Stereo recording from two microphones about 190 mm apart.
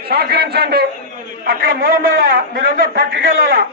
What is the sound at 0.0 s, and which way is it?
A man's voice, 55° right (ahead or behind).